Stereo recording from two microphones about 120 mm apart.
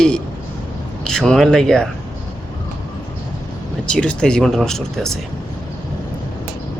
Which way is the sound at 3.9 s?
10° left (ahead or behind).